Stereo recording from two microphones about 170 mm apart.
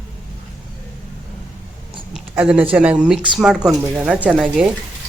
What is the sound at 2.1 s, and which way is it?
Speech, 5° right (ahead or behind).